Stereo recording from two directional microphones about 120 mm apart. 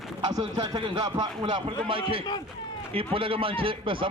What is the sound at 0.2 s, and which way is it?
A man's voice, 40° right (ahead or behind).